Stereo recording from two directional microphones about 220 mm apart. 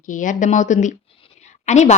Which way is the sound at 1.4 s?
30° left (ahead or behind).